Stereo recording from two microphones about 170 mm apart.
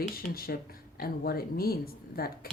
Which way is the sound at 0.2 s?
60° left (ahead or behind).